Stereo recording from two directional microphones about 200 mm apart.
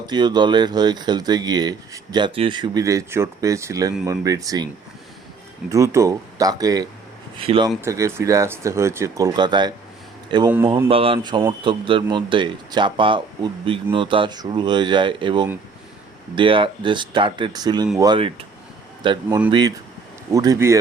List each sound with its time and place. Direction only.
0.0 s speech: 20° right (ahead or behind)
7.8 s speech: 15° right (ahead or behind)